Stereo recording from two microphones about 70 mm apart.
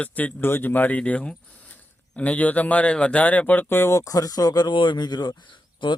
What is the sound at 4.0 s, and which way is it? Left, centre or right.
Speech, left.